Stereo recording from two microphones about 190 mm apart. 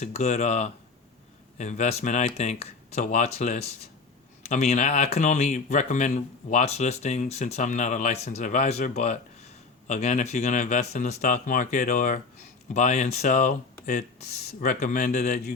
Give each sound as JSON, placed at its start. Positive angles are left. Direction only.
{"t": 0.0, "sound": "speech", "side_deg": 35}